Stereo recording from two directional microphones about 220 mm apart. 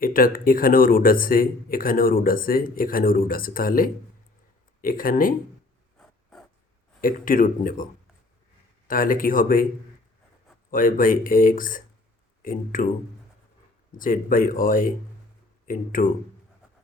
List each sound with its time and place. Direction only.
0.0 s speech: 40° left (ahead or behind)
7.0 s speech: 40° left (ahead or behind)
8.9 s speech: 40° left (ahead or behind)
10.7 s speech: 40° left (ahead or behind)
13.9 s speech: 40° left (ahead or behind)